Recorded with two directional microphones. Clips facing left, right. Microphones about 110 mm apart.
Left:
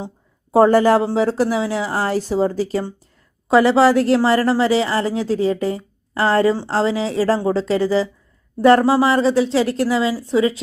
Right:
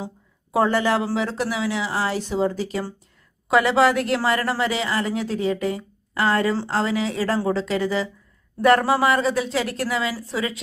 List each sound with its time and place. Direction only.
0.5 s a woman's voice: 40° left (ahead or behind)